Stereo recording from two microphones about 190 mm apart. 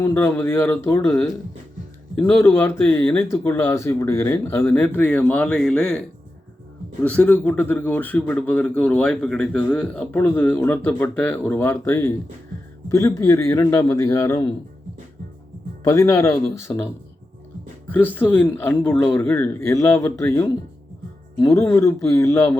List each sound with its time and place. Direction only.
0.0 s speech: 10° left (ahead or behind)
2.4 s speech: 10° left (ahead or behind)
15.8 s speech: 15° left (ahead or behind)